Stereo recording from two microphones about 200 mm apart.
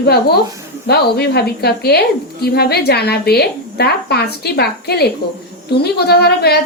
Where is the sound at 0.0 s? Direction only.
55° left (ahead or behind).